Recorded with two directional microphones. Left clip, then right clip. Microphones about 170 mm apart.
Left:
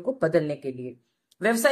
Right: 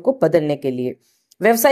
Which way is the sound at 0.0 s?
25° right (ahead or behind).